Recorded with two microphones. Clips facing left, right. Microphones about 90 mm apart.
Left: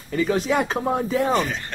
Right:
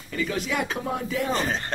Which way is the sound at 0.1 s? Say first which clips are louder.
Left 7 dB; 35° left (ahead or behind).